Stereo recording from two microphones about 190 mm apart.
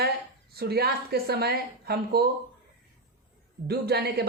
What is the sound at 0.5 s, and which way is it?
A woman's voice, 55° right (ahead or behind).